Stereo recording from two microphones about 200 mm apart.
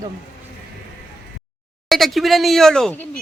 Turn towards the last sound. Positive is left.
turn(degrees=5)  # may be behind; listen again after turning